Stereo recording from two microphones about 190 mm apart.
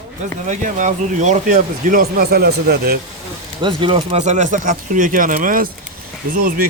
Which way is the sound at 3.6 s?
25° right (ahead or behind).